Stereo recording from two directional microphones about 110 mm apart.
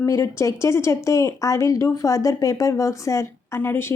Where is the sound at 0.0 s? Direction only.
25° left (ahead or behind).